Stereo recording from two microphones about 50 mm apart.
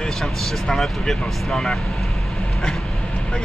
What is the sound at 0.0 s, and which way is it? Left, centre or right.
Speech, centre.